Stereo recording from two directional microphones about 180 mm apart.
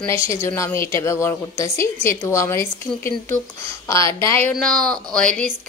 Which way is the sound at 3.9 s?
15° left (ahead or behind).